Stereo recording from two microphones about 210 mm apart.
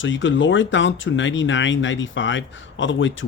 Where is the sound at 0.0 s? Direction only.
65° left (ahead or behind).